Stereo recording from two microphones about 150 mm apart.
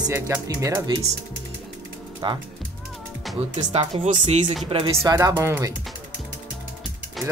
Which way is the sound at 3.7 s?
40° right (ahead or behind).